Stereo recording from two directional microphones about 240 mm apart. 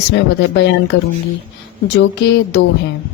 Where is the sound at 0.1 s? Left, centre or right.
Left.